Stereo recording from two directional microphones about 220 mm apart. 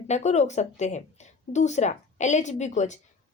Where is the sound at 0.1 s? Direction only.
30° left (ahead or behind).